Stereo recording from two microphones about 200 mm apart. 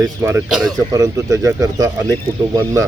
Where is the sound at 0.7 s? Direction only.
15° right (ahead or behind).